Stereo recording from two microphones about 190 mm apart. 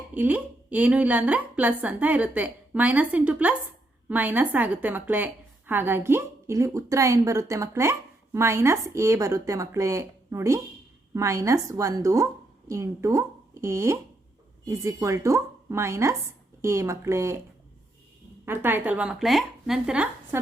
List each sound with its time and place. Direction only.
0.1 s a woman's voice: 10° right (ahead or behind)
18.4 s a woman's voice: 10° right (ahead or behind)